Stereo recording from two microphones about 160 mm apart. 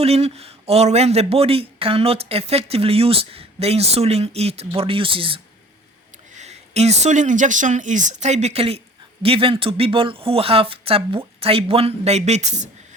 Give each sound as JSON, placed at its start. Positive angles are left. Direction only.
{"t": 0.0, "sound": "speech", "side_deg": -40}
{"t": 6.3, "sound": "speech", "side_deg": -45}